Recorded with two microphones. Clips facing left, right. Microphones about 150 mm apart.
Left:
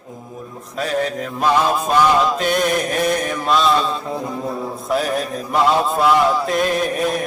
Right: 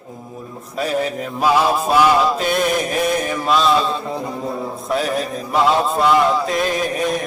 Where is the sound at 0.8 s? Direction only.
10° right (ahead or behind).